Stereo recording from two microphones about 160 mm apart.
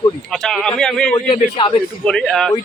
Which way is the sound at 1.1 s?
30° left (ahead or behind).